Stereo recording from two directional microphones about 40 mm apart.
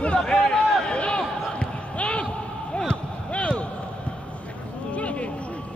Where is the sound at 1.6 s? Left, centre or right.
Left.